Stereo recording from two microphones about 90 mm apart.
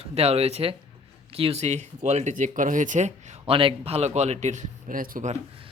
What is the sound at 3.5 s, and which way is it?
Speech, 85° right.